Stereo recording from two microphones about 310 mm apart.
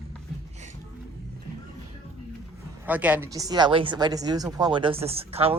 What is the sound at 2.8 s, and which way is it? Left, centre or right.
A woman's voice, centre.